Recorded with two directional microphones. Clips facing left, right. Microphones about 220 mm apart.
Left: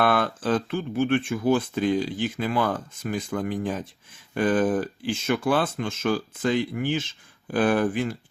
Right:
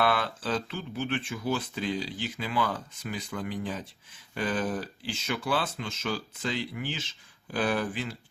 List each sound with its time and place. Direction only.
0.0 s speech: 50° left (ahead or behind)